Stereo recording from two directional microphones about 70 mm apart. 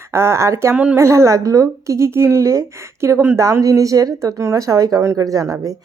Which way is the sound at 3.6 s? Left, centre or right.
Right.